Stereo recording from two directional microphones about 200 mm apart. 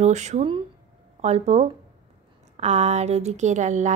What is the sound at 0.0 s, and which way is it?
A woman's voice, 35° right (ahead or behind).